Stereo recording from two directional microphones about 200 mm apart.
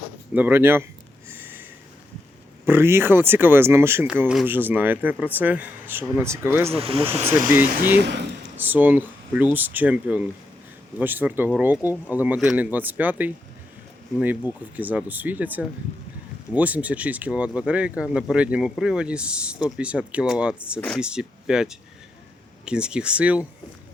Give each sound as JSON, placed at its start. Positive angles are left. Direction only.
{"t": 0.3, "sound": "speech", "side_deg": -10}
{"t": 1.3, "sound": "sniff", "side_deg": -10}
{"t": 2.6, "sound": "speech", "side_deg": -10}
{"t": 6.7, "sound": "speech", "side_deg": -30}
{"t": 7.4, "sound": "speech", "side_deg": -10}
{"t": 7.9, "sound": "speech", "side_deg": -55}
{"t": 8.5, "sound": "speech", "side_deg": -10}